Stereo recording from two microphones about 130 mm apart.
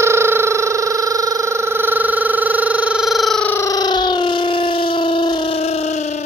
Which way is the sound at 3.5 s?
25° left (ahead or behind).